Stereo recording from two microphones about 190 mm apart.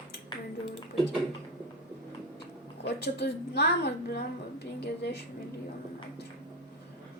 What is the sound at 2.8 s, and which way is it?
Speech, 60° left (ahead or behind).